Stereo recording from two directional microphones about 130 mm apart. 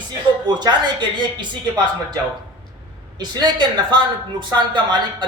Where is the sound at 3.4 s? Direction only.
35° right (ahead or behind).